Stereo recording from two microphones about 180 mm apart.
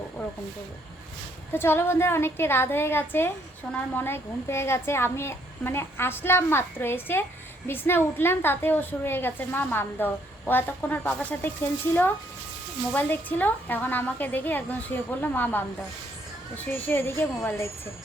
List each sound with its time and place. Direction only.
1.5 s a woman's voice: 15° left (ahead or behind)
12.9 s a woman's voice: 10° left (ahead or behind)
16.6 s a woman's voice: 10° left (ahead or behind)